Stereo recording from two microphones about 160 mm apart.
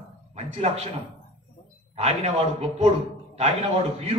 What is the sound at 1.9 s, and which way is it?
A man's voice, 40° right (ahead or behind).